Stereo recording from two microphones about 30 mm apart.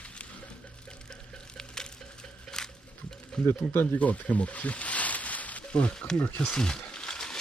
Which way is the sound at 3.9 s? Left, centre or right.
Left.